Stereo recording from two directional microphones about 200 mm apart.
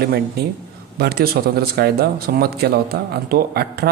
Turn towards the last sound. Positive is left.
turn(degrees=-50)  # may be behind; listen again after turning